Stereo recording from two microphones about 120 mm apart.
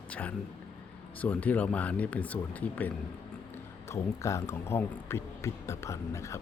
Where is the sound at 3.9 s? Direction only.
25° left (ahead or behind).